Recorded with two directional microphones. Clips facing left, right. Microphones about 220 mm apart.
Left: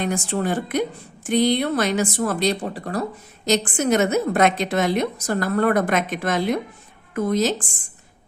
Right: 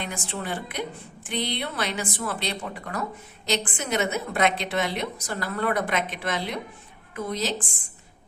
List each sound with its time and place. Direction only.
0.0 s a woman's voice: 45° left (ahead or behind)